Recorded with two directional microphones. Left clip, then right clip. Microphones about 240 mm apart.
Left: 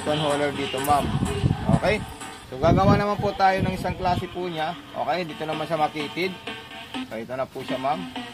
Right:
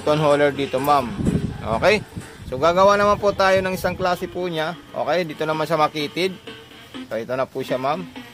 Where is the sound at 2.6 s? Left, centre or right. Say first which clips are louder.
Right 5 dB; right.